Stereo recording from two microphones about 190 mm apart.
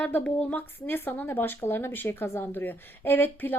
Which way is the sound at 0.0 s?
5° left (ahead or behind).